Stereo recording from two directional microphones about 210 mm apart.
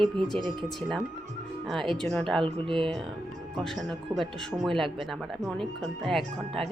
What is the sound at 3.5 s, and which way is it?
Speech, centre (ahead or behind).